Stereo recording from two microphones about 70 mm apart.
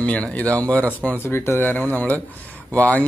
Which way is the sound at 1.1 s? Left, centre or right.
Left.